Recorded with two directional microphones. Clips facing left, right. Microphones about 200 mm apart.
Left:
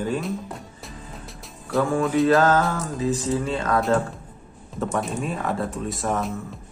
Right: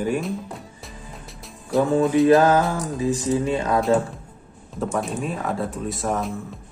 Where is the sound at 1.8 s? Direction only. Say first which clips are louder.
Right 3 dB; 20° right (ahead or behind).